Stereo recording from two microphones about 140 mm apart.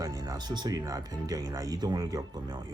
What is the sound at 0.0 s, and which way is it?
Speech, 25° right (ahead or behind).